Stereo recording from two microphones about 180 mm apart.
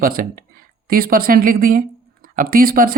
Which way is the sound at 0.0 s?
55° right (ahead or behind).